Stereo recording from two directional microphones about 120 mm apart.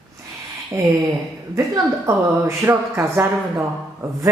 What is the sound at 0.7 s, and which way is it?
A woman's voice, 25° right (ahead or behind).